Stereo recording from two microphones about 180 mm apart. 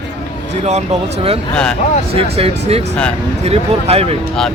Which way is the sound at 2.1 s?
30° right (ahead or behind).